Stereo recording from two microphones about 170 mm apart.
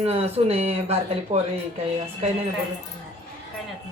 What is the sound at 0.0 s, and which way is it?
Speech, 35° right (ahead or behind).